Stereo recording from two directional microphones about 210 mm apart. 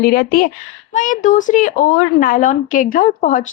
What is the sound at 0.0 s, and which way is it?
A woman's voice, 45° left (ahead or behind).